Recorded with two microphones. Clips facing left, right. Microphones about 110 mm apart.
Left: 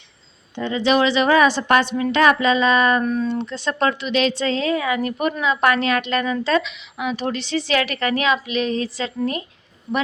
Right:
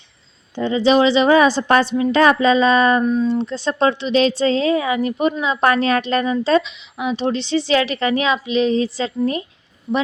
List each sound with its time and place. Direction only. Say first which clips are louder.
0.6 s speech: right 4 dB; 30° right (ahead or behind)
3.0 s a woman's voice: right 4 dB; 20° right (ahead or behind)
3.4 s a woman's voice: right 3 dB; 30° right (ahead or behind)